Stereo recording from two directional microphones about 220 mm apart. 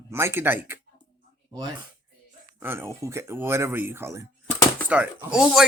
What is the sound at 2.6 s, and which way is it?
A man's voice, 10° right (ahead or behind).